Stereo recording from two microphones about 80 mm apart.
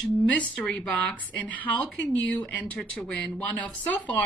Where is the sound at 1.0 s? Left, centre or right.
Centre.